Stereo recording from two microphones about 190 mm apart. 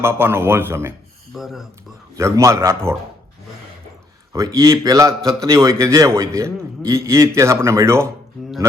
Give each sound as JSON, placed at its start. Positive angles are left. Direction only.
{"t": 0.0, "sound": "speech", "side_deg": -10}
{"t": 1.4, "sound": "speech", "side_deg": 0}
{"t": 2.1, "sound": "speech", "side_deg": -15}
{"t": 4.3, "sound": "speech", "side_deg": -15}